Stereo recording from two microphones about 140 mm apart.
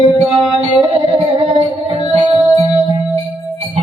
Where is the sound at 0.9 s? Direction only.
40° right (ahead or behind).